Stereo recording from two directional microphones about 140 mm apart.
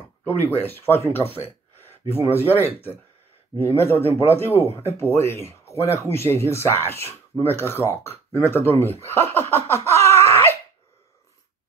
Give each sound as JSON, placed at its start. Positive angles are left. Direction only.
{"t": 0.4, "sound": "speech", "side_deg": 15}
{"t": 9.9, "sound": "screaming", "side_deg": 20}